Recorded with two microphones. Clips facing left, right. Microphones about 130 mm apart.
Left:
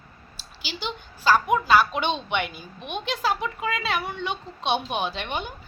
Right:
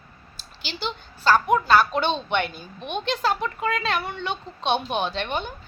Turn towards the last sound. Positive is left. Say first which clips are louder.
# right 2 dB
turn(degrees=10)  # may be behind; listen again after turning